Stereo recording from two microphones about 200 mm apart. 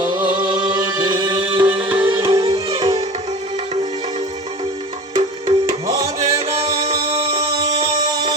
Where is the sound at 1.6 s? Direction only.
10° right (ahead or behind).